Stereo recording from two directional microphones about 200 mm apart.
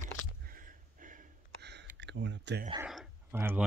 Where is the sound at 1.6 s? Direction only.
60° right (ahead or behind).